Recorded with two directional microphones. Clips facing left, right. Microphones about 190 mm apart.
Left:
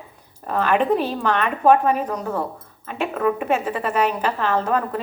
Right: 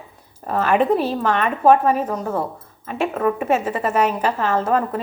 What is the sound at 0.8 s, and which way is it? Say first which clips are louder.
Speech: right 2 dB; 40° right (ahead or behind).